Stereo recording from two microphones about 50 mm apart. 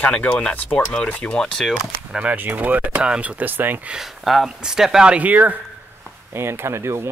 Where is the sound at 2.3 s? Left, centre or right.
Right.